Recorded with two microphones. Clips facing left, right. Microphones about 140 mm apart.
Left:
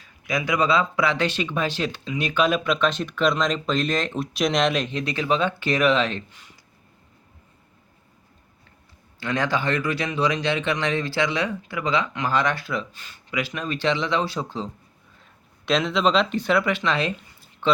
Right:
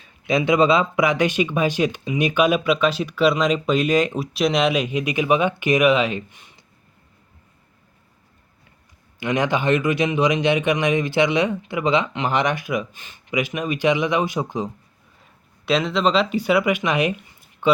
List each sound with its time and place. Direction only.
0.0 s speech: 25° right (ahead or behind)
9.2 s speech: 20° right (ahead or behind)
15.2 s speech: 5° right (ahead or behind)